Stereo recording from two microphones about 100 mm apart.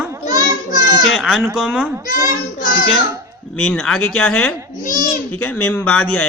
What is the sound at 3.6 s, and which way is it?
Speech, 10° left (ahead or behind).